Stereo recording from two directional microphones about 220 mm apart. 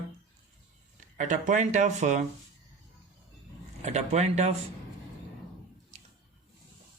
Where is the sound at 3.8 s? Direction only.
30° right (ahead or behind).